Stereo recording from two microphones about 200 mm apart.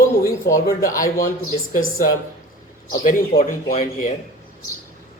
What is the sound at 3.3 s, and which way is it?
Speech, 45° left (ahead or behind).